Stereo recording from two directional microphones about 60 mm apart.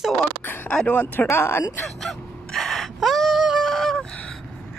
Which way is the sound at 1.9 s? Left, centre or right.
Centre.